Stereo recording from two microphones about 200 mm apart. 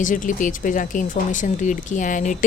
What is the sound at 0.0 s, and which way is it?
A woman's voice, 40° left (ahead or behind).